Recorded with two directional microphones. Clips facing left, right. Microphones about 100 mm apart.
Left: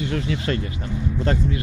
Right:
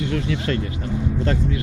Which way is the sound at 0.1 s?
20° left (ahead or behind).